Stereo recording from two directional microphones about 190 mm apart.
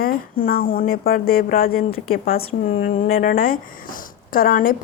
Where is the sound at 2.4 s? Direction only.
35° left (ahead or behind).